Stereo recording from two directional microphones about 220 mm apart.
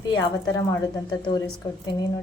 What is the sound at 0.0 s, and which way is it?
A woman's voice, 20° left (ahead or behind).